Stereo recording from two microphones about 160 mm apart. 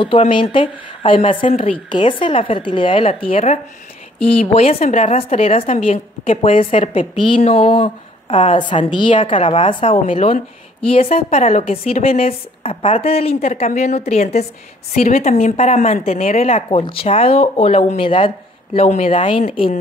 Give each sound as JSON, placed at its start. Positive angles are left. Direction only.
{"t": 0.0, "sound": "speech", "side_deg": 30}
{"t": 4.6, "sound": "a woman's voice", "side_deg": 40}